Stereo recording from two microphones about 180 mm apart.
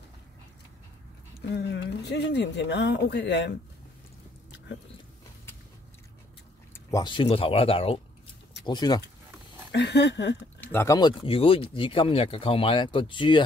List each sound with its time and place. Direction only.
1.5 s speech: 70° left (ahead or behind)
6.7 s speech: 20° left (ahead or behind)
9.7 s speech: 70° left (ahead or behind)
10.6 s speech: 10° left (ahead or behind)
11.2 s speech: 30° left (ahead or behind)